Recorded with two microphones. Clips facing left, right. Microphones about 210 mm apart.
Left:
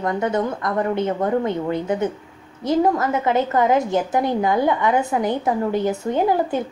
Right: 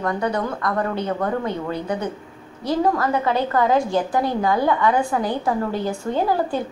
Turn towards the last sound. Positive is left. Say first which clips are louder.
# left 2 dB
turn(degrees=20)  # may be behind; listen again after turning